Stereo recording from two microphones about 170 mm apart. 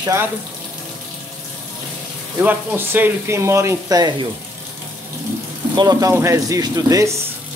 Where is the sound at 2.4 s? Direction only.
10° right (ahead or behind).